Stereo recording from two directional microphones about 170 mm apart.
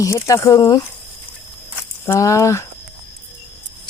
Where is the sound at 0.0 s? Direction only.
15° left (ahead or behind).